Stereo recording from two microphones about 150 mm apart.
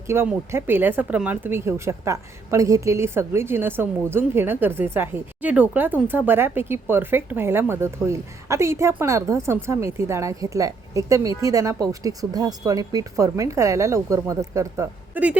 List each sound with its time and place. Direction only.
0.1 s speech: 15° right (ahead or behind)